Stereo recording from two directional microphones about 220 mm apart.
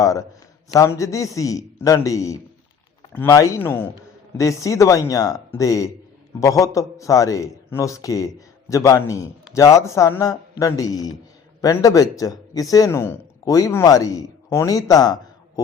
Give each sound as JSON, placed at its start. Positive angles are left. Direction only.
{"t": 0.0, "sound": "a man's voice", "side_deg": 15}